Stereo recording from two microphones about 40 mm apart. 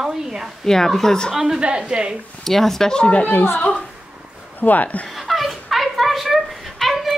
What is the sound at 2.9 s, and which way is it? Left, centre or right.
Speech, left.